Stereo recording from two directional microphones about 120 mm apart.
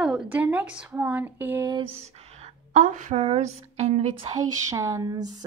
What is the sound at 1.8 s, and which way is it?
Speech, 60° right (ahead or behind).